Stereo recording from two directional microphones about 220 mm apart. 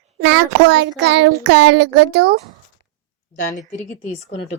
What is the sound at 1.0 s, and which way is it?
Child singing, 55° right (ahead or behind).